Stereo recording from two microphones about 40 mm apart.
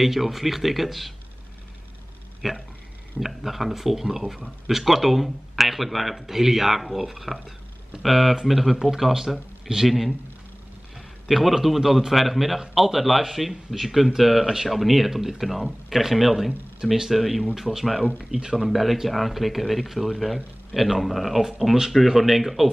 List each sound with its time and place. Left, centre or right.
0.0 s a man's voice: centre
2.4 s a man's voice: centre
18.3 s speech: centre
18.6 s a man's voice: centre